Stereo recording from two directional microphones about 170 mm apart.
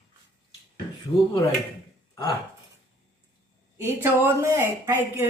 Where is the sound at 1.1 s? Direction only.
30° left (ahead or behind).